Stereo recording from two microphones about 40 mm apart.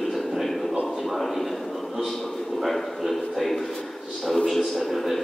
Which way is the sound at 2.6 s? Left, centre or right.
Centre.